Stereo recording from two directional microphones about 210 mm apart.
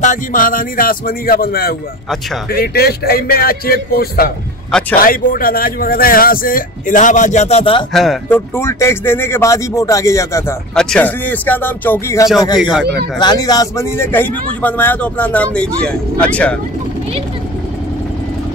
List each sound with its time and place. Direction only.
0.0 s speech: 40° left (ahead or behind)
7.9 s speech: centre (ahead or behind)
8.5 s a man's voice: 10° left (ahead or behind)
10.7 s a man's voice: 5° left (ahead or behind)
12.5 s speech: centre (ahead or behind)
12.8 s speech: 50° right (ahead or behind)
13.2 s a man's voice: 20° left (ahead or behind)